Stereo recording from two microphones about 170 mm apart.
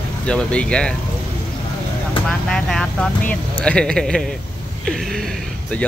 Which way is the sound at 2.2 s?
5° left (ahead or behind).